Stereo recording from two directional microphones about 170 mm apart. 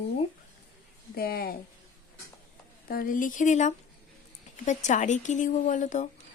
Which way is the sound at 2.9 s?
55° left (ahead or behind).